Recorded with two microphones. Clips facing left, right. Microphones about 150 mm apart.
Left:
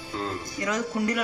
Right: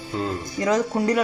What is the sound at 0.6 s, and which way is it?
Speech, 35° right (ahead or behind).